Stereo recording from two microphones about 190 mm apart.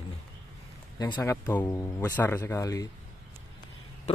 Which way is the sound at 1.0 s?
20° left (ahead or behind).